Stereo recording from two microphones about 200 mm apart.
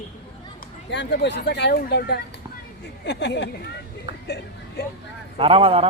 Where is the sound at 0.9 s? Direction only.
60° left (ahead or behind).